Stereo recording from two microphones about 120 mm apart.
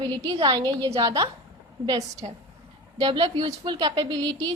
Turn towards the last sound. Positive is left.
turn(degrees=-35)  # may be behind; listen again after turning